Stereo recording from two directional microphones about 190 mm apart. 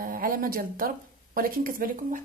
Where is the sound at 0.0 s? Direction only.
50° right (ahead or behind).